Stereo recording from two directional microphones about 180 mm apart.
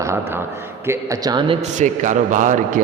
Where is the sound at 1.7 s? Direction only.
45° right (ahead or behind).